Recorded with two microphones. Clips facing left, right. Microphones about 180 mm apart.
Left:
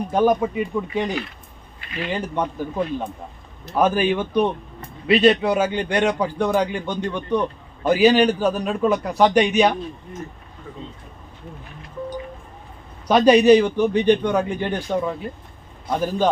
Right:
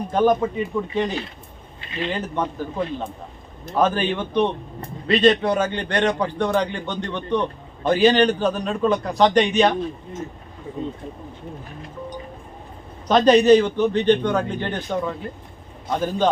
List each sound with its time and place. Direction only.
0.1 s a man's voice: 10° left (ahead or behind)
1.8 s a sound: 25° right (ahead or behind)
2.1 s a man's voice: 10° left (ahead or behind)
13.1 s a man's voice: 10° left (ahead or behind)